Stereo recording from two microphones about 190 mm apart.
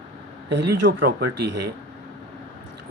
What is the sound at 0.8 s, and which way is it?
Speech, 70° right (ahead or behind).